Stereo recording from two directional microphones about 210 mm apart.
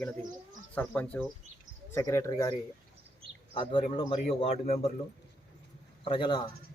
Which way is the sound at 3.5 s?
25° left (ahead or behind).